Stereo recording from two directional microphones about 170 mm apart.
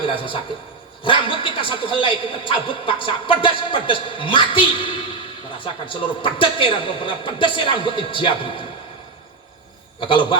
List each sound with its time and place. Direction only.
0.0 s a man's voice: 30° left (ahead or behind)
10.1 s a man's voice: 30° left (ahead or behind)